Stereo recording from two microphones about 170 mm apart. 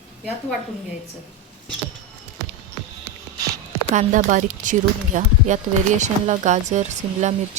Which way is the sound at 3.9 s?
50° right (ahead or behind).